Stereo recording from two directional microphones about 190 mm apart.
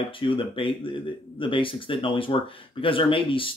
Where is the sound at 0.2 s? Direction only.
25° left (ahead or behind).